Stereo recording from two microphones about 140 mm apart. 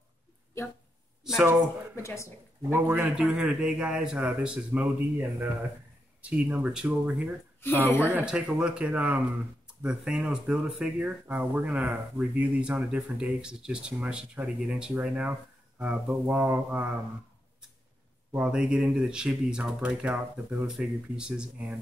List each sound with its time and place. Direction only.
1.2 s speech: 5° right (ahead or behind)
2.0 s speech: 20° left (ahead or behind)
2.7 s speech: 10° right (ahead or behind)
7.6 s speech: 15° left (ahead or behind)
8.1 s speech: 5° right (ahead or behind)
18.3 s speech: 10° right (ahead or behind)